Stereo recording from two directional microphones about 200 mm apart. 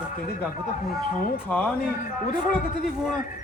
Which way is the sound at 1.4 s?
5° left (ahead or behind).